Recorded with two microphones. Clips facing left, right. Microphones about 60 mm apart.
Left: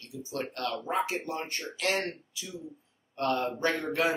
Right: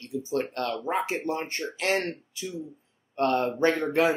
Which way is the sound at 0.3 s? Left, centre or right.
Right.